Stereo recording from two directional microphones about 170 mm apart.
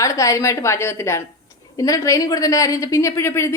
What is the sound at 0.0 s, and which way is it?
A woman's voice, 20° left (ahead or behind).